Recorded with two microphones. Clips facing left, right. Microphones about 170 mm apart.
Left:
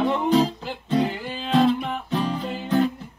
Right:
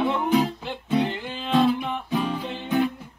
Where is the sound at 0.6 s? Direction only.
5° left (ahead or behind).